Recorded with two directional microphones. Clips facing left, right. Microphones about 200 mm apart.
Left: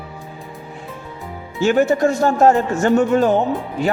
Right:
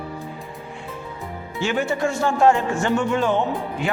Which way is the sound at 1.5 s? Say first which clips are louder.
Left 8 dB; 45° left (ahead or behind).